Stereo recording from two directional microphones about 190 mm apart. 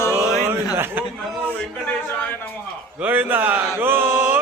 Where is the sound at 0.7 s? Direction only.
10° right (ahead or behind).